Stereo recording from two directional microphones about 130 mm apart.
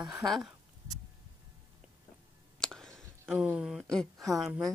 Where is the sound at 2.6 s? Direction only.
5° left (ahead or behind).